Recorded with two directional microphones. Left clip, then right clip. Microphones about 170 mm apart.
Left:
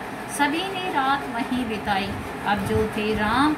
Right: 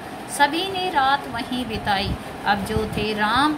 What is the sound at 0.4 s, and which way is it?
A woman's voice, 55° right (ahead or behind).